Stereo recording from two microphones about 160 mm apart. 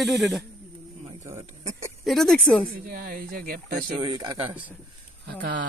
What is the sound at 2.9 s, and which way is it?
Speech, 70° right (ahead or behind).